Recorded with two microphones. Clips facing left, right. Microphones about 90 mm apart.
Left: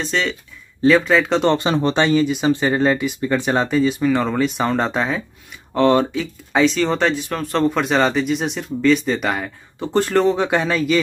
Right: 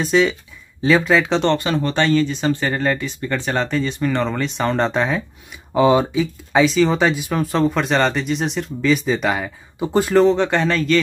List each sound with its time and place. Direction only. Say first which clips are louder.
0.0 s speech: right 6 dB; 5° right (ahead or behind)
1.5 s speech: left 2 dB; 20° left (ahead or behind)